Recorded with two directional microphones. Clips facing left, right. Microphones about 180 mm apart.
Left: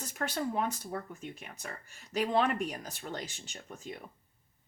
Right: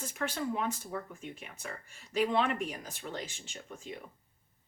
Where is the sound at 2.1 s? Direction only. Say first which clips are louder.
Even; 40° left (ahead or behind).